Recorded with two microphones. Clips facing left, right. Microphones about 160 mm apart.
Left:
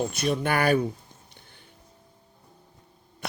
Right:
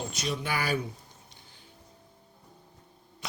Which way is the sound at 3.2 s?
55° left (ahead or behind).